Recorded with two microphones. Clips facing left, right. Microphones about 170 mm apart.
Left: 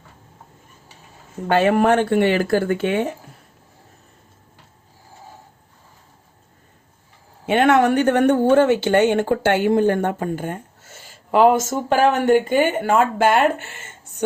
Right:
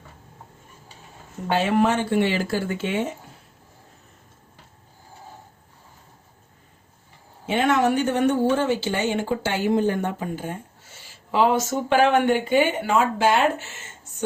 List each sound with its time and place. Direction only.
1.5 s a woman's voice: 55° left (ahead or behind)
7.4 s a woman's voice: 65° left (ahead or behind)